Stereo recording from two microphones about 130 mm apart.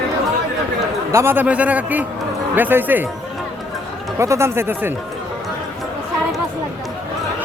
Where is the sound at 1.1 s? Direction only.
15° right (ahead or behind).